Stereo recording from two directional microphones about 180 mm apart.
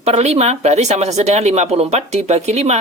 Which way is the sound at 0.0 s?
35° right (ahead or behind).